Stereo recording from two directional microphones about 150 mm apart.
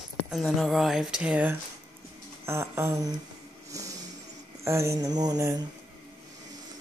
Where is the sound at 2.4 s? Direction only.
20° right (ahead or behind).